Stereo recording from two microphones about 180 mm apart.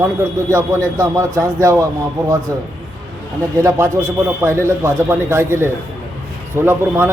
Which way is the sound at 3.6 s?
15° right (ahead or behind).